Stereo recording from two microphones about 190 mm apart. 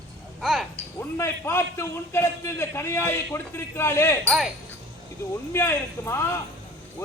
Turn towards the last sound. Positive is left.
turn(degrees=15)  # may be behind; listen again after turning